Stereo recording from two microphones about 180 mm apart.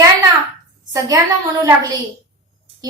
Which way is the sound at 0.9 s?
20° right (ahead or behind).